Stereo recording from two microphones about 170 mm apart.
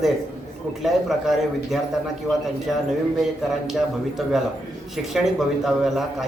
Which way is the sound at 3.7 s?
Centre (ahead or behind).